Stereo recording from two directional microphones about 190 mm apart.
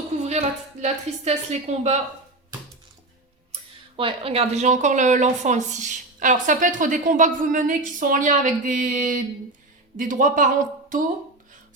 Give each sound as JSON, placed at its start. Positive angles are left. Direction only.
{"t": 0.2, "sound": "speech", "side_deg": -35}
{"t": 3.5, "sound": "a woman's voice", "side_deg": -30}